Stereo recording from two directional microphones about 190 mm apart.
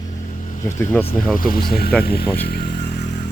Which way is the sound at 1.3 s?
50° left (ahead or behind).